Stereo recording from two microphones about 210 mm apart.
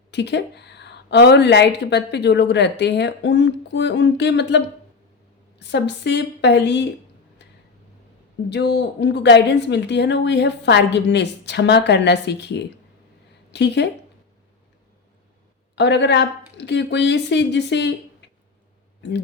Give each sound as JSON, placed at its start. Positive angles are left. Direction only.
{"t": 0.1, "sound": "a woman's voice", "side_deg": 55}
{"t": 8.4, "sound": "a woman's voice", "side_deg": 55}
{"t": 15.7, "sound": "a woman's voice", "side_deg": 55}